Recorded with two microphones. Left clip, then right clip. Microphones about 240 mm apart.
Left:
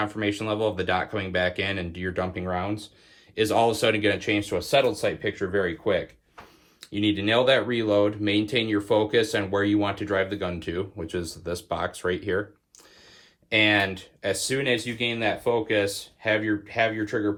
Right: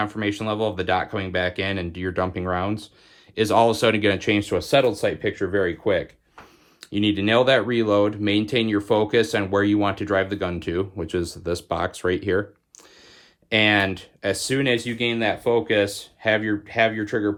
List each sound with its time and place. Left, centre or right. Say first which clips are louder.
0.0 s speech: right 2 dB; centre; by 6.1 s right
6.9 s speech: right 3 dB; right
13.5 s speech: right 2 dB; right